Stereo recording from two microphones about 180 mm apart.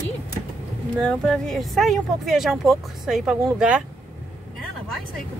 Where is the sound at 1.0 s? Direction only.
5° left (ahead or behind).